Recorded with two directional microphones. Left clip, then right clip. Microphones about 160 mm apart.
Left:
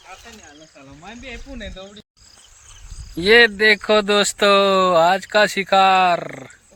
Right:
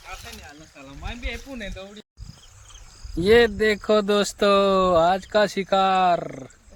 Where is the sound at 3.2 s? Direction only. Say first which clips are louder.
Left 4 dB; 5° right (ahead or behind).